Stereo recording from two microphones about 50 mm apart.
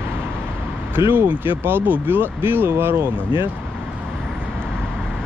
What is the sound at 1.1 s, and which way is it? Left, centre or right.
Speech, right.